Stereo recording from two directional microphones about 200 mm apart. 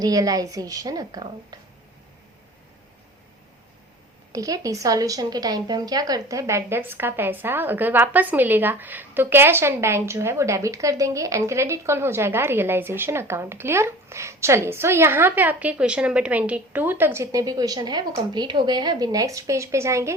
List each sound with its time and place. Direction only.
0.0 s a woman's voice: 15° right (ahead or behind)
4.3 s a woman's voice: 15° right (ahead or behind)